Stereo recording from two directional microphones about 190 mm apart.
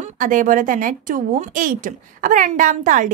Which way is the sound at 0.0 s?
45° right (ahead or behind).